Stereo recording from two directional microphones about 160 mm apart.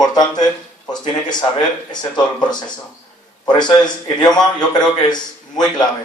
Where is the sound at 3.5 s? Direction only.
25° left (ahead or behind).